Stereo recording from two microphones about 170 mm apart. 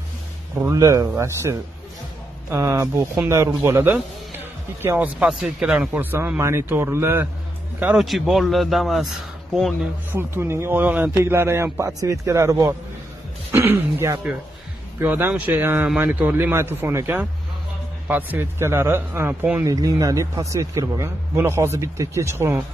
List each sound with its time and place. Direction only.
0.6 s a man's voice: 20° right (ahead or behind)
7.8 s a man's voice: 5° right (ahead or behind)
10.1 s a man's voice: 15° right (ahead or behind)